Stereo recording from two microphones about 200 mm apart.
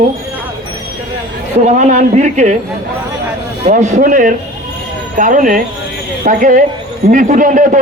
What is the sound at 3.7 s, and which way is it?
A man's voice, 35° right (ahead or behind).